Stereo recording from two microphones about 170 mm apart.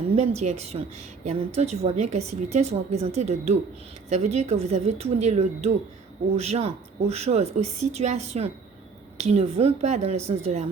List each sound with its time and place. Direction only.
0.2 s a woman's voice: 40° right (ahead or behind)